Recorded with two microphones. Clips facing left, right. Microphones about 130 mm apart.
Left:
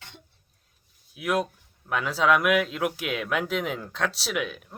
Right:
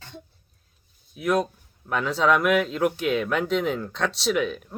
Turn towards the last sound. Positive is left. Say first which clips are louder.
# right 6 dB
turn(degrees=5)  # may be behind; listen again after turning